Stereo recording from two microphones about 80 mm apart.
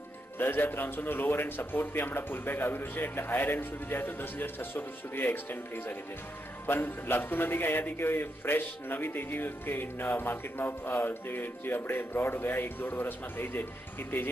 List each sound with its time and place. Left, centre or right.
0.4 s speech: left